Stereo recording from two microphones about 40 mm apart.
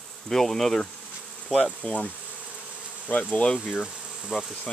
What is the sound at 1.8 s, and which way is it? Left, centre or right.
Speech, left.